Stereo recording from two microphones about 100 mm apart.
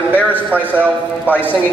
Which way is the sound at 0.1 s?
15° right (ahead or behind).